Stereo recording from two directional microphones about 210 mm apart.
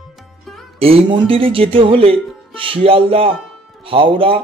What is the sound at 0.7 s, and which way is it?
Speech, 25° right (ahead or behind).